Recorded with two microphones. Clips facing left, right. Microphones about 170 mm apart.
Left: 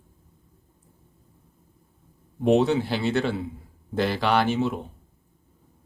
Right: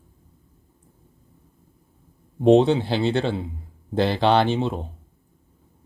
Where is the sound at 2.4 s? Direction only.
30° right (ahead or behind).